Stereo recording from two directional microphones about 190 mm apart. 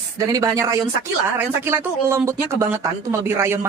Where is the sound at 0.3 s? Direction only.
15° right (ahead or behind).